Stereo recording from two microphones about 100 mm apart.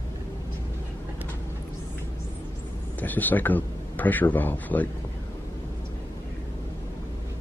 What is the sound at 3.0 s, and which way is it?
Speech, 15° left (ahead or behind).